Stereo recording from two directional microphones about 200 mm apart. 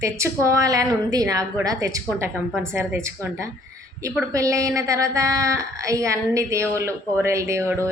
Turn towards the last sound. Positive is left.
turn(degrees=-15)  # may be behind; listen again after turning